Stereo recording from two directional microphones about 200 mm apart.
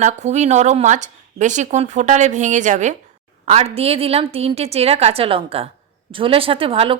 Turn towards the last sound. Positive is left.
turn(degrees=-25)  # may be behind; listen again after turning